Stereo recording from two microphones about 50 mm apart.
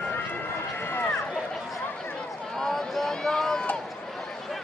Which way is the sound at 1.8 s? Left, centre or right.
Left.